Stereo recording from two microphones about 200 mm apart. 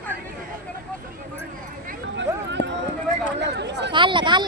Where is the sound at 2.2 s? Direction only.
60° right (ahead or behind).